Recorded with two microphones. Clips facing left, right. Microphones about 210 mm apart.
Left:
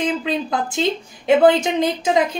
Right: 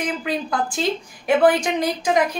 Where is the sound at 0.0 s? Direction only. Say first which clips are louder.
Left 3 dB; 25° left (ahead or behind).